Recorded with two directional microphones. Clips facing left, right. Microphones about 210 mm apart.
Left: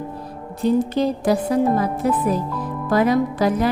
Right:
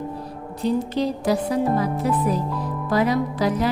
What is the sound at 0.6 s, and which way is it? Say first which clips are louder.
A woman's voice: left 4 dB; 50° left (ahead or behind).